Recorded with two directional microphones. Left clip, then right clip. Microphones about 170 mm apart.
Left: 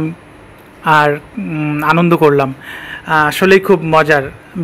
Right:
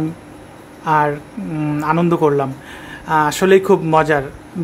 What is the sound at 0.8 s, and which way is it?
Speech, 30° left (ahead or behind).